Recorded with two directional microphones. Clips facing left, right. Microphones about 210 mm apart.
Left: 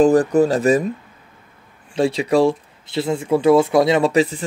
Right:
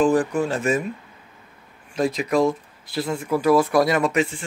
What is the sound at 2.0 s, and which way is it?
Speech, 30° left (ahead or behind).